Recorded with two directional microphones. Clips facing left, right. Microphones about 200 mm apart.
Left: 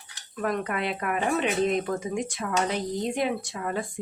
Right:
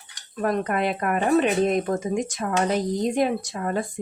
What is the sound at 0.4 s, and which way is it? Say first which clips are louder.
Speech: right 5 dB; 40° right (ahead or behind).